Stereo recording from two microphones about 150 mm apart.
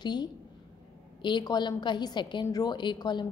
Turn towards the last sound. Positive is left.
turn(degrees=30)  # may be behind; listen again after turning